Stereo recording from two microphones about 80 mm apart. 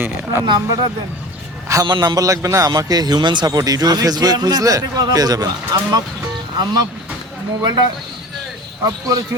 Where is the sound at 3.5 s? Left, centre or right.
Right.